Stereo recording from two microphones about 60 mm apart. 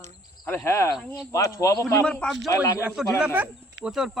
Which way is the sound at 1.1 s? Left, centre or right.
Left.